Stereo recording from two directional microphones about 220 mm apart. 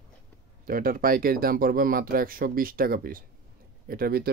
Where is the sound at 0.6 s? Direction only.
40° right (ahead or behind).